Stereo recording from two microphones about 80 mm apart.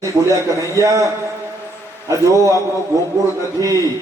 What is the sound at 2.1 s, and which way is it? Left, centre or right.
Speech, right.